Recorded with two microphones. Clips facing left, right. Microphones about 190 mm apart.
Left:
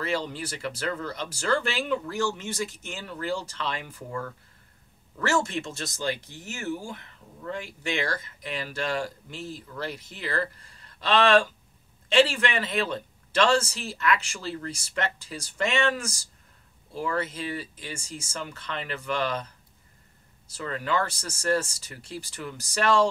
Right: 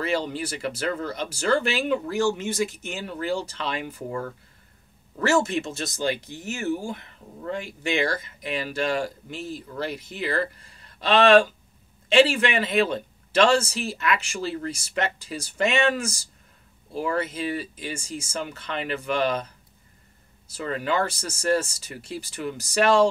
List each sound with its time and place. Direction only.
0.0 s speech: 15° right (ahead or behind)
3.8 s speech: 25° right (ahead or behind)
5.7 s speech: 20° right (ahead or behind)
20.5 s speech: 15° right (ahead or behind)